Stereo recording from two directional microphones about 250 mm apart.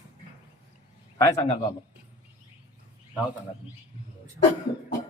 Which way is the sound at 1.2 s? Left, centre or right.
Centre.